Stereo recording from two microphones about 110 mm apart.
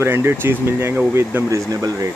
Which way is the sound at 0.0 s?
20° right (ahead or behind).